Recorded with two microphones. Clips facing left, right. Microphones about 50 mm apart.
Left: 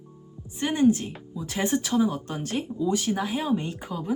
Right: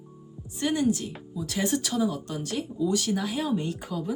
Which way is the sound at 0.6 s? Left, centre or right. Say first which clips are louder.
Left 3 dB; left.